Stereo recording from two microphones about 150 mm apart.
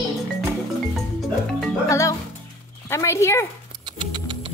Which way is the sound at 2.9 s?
20° left (ahead or behind).